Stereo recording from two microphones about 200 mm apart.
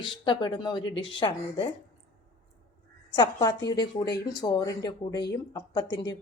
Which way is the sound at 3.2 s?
20° left (ahead or behind).